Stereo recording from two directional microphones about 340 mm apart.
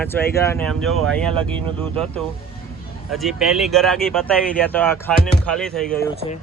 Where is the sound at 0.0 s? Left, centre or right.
Centre.